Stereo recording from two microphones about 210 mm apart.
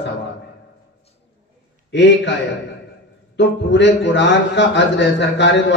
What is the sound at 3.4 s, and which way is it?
A man's voice, 55° left (ahead or behind).